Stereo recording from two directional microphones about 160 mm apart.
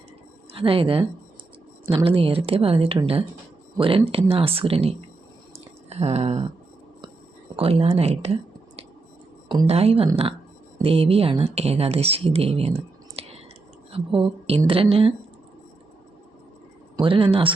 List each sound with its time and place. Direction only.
0.5 s speech: 35° right (ahead or behind)
2.0 s speech: 35° right (ahead or behind)
5.5 s a sound: 40° right (ahead or behind)
7.5 s speech: 35° right (ahead or behind)
9.6 s speech: 40° right (ahead or behind)
17.0 s speech: 35° right (ahead or behind)